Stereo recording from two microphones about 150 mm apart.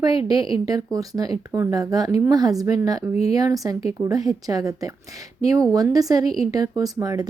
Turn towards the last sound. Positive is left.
turn(degrees=-25)  # may be behind; listen again after turning